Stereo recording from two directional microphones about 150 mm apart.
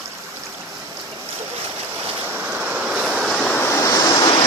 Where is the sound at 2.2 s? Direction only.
15° right (ahead or behind); by 4.4 s 30° left (ahead or behind).